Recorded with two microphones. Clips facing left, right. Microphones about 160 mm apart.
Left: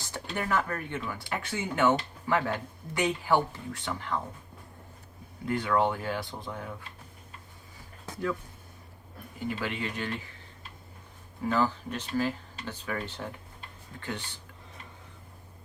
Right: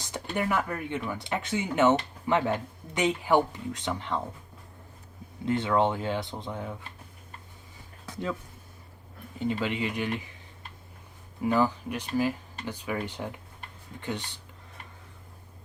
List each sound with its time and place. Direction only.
0.3 s speech: 15° right (ahead or behind)
5.5 s speech: 25° right (ahead or behind)
9.4 s speech: 20° right (ahead or behind)
11.4 s speech: 15° right (ahead or behind)